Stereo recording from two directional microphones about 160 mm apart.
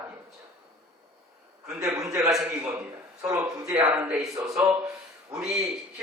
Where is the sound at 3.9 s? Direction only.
10° right (ahead or behind).